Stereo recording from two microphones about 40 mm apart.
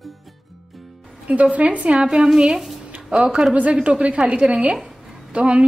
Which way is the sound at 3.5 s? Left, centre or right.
Right.